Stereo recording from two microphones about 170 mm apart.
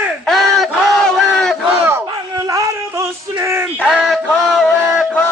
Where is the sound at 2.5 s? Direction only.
20° right (ahead or behind).